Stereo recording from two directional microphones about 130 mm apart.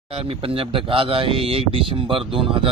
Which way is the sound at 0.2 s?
45° right (ahead or behind).